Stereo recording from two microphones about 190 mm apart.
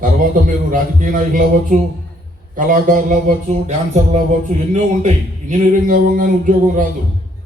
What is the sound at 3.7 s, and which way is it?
Music, 35° right (ahead or behind).